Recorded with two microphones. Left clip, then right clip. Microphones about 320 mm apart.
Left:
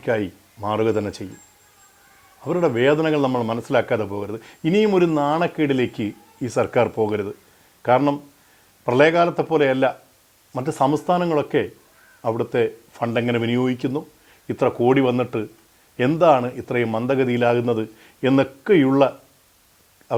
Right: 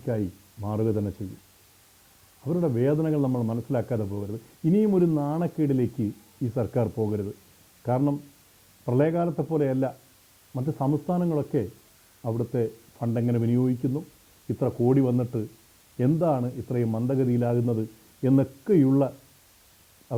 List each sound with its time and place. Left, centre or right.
0.0 s speech: centre
2.4 s a man's voice: centre